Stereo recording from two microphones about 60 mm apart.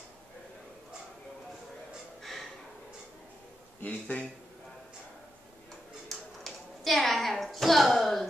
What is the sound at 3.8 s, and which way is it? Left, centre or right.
Speech, left.